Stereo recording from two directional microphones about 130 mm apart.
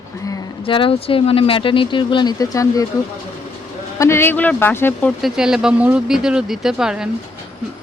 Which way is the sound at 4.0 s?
20° left (ahead or behind).